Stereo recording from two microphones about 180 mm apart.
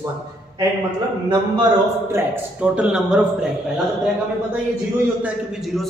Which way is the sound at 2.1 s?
5° right (ahead or behind).